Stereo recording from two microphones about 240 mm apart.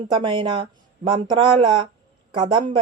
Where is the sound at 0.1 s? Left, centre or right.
Right.